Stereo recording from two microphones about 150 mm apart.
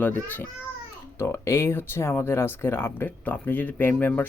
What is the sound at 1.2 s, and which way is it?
Speech, 15° left (ahead or behind).